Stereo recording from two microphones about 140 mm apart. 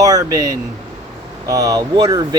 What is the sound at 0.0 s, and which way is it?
Speech, 25° right (ahead or behind).